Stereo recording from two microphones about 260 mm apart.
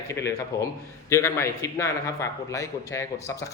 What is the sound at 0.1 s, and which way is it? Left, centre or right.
A man's voice, centre.